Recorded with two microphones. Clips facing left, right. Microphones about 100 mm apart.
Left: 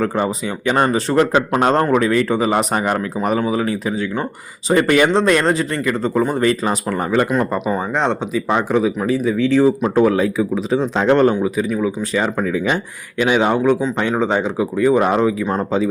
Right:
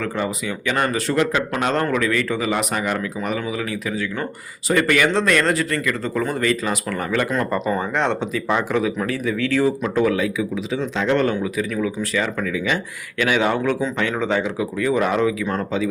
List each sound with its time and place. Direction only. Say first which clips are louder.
0.0 s speech: left 5 dB; 30° left (ahead or behind)
7.3 s speech: left 3 dB; 15° left (ahead or behind); by 11.3 s 35° left (ahead or behind)
11.3 s speech: left 4 dB; 25° left (ahead or behind)
13.1 s speech: left 4 dB; 25° left (ahead or behind)